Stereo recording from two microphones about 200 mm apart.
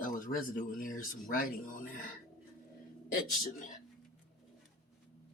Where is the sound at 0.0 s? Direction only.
40° left (ahead or behind).